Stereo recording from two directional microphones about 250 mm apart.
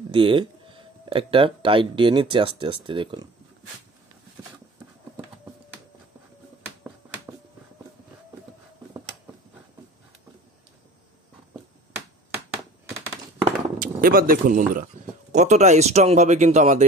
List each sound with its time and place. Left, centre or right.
0.1 s speech: centre
13.7 s speech: right